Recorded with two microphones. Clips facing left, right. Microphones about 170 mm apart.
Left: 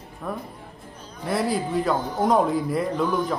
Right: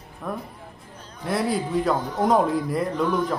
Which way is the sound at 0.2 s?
Centre (ahead or behind).